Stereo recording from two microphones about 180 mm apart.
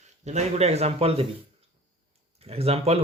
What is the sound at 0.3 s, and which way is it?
A man's voice, 40° right (ahead or behind).